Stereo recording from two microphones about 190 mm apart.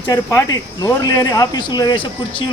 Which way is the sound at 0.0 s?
15° left (ahead or behind).